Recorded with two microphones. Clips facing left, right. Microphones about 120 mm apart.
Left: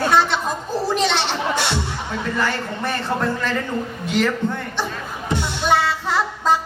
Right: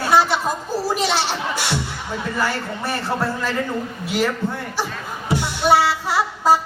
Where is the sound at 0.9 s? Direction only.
5° right (ahead or behind).